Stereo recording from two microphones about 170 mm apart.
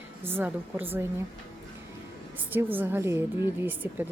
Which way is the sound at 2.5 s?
10° right (ahead or behind).